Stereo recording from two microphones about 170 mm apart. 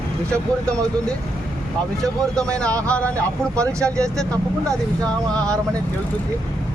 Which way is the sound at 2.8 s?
5° left (ahead or behind).